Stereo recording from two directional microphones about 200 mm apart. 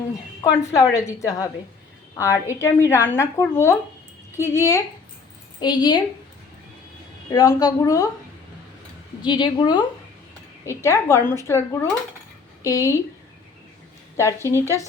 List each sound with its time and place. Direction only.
0.4 s a woman's voice: 15° left (ahead or behind)
7.3 s speech: 20° left (ahead or behind)
9.2 s a woman's voice: 20° left (ahead or behind)
14.2 s speech: 15° left (ahead or behind)